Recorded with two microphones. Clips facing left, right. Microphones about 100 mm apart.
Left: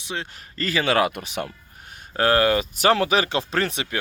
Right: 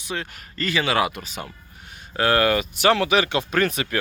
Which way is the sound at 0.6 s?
35° left (ahead or behind).